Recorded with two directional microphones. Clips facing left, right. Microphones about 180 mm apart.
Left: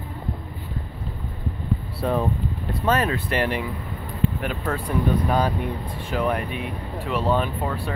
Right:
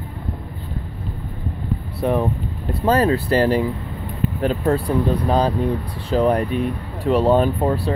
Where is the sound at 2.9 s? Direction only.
35° right (ahead or behind).